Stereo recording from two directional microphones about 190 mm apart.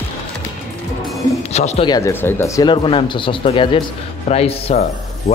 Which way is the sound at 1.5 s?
35° left (ahead or behind).